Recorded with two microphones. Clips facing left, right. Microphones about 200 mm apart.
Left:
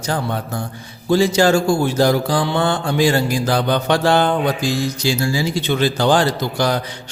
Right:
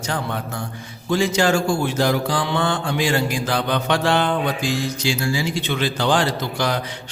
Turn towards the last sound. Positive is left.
turn(degrees=40)  # may be behind; listen again after turning